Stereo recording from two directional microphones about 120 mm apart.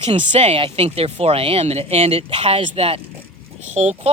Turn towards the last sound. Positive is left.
turn(degrees=-70)  # may be behind; listen again after turning